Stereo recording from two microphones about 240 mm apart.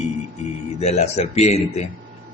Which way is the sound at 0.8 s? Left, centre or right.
Left.